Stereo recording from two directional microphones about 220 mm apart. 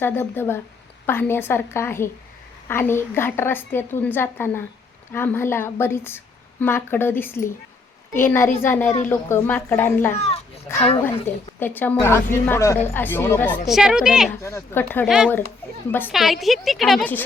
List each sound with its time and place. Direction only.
0.0 s a woman's voice: 10° left (ahead or behind)
10.2 s children playing: 30° left (ahead or behind)
11.6 s a woman's voice: 10° left (ahead or behind)
13.7 s a woman's voice: 5° right (ahead or behind)
14.4 s a woman's voice: 10° left (ahead or behind)
15.0 s a woman's voice: centre (ahead or behind)
15.9 s a woman's voice: 10° left (ahead or behind)